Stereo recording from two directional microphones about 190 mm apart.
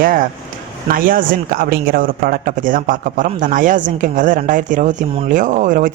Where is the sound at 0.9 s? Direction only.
45° right (ahead or behind).